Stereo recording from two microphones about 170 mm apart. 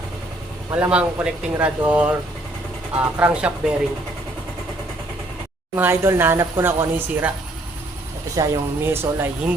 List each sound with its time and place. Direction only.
0.7 s speech: 10° right (ahead or behind)
5.7 s speech: 15° right (ahead or behind)
8.4 s speech: 15° right (ahead or behind)